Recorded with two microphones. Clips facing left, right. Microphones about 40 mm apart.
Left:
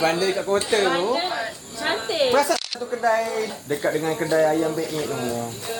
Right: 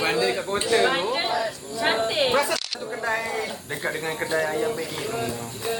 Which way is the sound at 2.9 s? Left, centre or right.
Centre.